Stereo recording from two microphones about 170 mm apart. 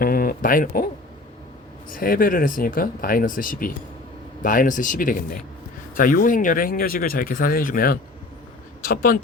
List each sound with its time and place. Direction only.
0.0 s speech: 55° left (ahead or behind)
1.9 s speech: 55° left (ahead or behind)